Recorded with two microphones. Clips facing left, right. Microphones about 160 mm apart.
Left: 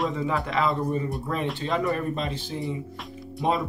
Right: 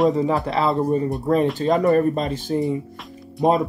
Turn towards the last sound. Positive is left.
turn(degrees=-45)  # may be behind; listen again after turning